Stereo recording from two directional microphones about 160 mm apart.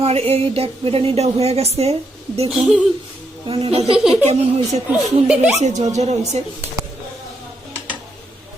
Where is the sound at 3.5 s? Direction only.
40° right (ahead or behind).